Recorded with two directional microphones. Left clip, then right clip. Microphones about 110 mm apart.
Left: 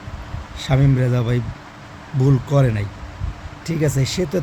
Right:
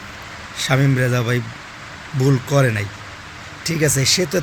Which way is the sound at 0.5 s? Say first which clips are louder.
Right 3 dB; 15° left (ahead or behind).